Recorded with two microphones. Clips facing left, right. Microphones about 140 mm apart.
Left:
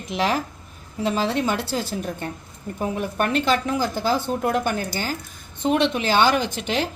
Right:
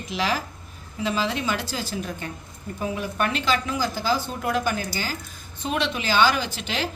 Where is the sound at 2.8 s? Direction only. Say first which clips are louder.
Left 2 dB; 50° left (ahead or behind).